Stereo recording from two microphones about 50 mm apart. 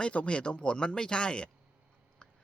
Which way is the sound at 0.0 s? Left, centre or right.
Left.